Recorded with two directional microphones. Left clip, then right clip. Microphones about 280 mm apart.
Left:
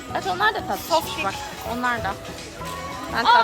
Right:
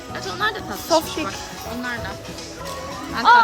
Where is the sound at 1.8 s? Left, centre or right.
Centre.